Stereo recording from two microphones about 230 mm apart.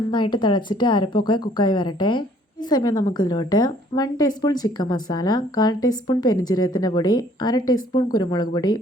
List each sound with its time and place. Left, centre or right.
0.1 s a woman's voice: centre